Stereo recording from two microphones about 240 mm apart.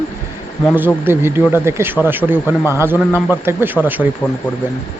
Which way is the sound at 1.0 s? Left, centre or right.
Centre.